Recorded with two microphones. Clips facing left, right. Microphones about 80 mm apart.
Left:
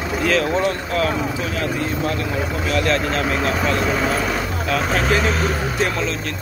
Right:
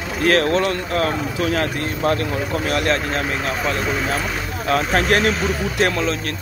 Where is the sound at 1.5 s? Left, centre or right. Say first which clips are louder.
Right 1 dB; right.